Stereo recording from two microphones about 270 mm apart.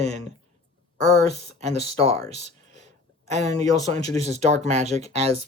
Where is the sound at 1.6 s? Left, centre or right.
Right.